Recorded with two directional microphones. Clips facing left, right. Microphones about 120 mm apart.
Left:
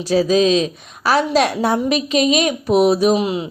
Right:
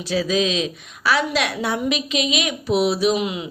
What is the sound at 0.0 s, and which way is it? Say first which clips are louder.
A woman's voice: left 6 dB; 40° left (ahead or behind).